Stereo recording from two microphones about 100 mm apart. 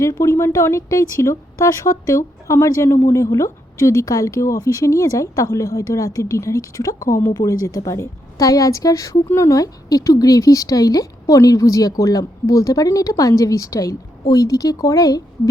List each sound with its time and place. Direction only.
0.0 s speech: 30° left (ahead or behind)